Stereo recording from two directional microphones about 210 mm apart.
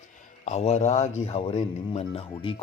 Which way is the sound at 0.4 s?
30° left (ahead or behind).